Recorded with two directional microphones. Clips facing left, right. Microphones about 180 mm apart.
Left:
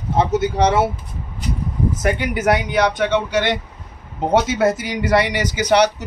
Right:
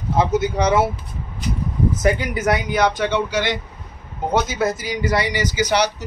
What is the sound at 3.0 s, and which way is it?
Speech, 60° left (ahead or behind).